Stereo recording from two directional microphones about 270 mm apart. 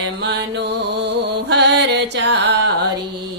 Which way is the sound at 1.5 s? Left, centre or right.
Right.